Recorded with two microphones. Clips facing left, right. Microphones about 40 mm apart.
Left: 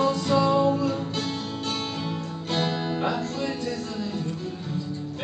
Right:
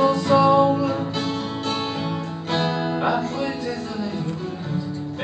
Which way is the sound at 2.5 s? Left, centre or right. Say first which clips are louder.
Right 4 dB; centre.